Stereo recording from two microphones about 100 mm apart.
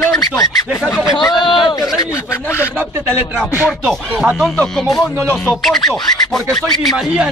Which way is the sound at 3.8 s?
Centre (ahead or behind).